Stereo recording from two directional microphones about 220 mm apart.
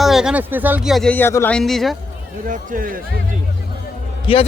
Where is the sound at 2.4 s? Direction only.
40° right (ahead or behind).